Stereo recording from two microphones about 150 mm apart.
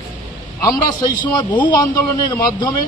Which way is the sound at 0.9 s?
30° left (ahead or behind).